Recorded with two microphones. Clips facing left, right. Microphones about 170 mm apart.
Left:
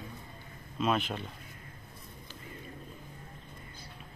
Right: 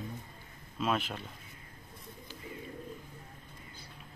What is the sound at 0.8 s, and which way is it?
Speech, centre (ahead or behind).